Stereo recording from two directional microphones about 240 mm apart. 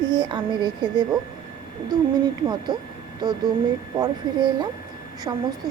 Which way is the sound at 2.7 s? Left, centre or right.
Centre.